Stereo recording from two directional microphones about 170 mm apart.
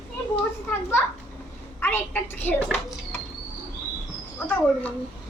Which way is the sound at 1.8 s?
10° left (ahead or behind).